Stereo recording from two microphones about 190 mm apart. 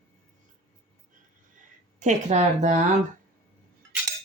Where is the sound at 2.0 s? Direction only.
40° right (ahead or behind).